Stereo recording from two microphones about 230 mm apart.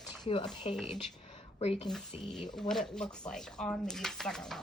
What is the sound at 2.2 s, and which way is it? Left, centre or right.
Speech, centre.